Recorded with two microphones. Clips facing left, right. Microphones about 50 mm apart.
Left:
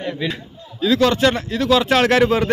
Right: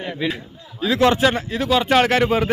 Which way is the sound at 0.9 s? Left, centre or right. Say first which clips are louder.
Left 1 dB; right.